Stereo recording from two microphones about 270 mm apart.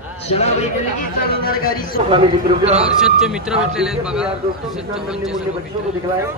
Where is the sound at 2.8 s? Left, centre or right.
Centre.